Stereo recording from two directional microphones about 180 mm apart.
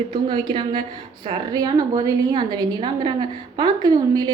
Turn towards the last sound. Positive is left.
turn(degrees=-20)  # may be behind; listen again after turning